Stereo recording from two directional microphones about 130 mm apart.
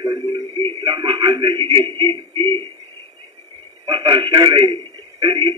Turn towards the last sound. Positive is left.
turn(degrees=-40)  # may be behind; listen again after turning